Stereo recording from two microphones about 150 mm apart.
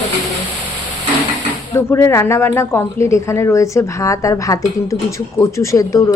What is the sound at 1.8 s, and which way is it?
Speech, 15° left (ahead or behind).